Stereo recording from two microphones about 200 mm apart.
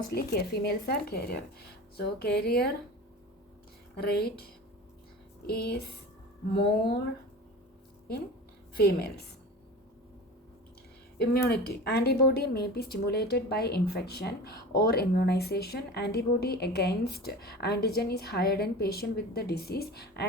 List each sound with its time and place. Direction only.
0.1 s speech: 50° left (ahead or behind)
3.9 s speech: 50° left (ahead or behind)
5.5 s speech: 50° left (ahead or behind)
8.8 s speech: 50° left (ahead or behind)
11.2 s speech: 50° left (ahead or behind)